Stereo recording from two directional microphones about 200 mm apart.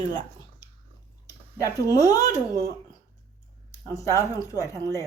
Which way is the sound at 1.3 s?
15° left (ahead or behind).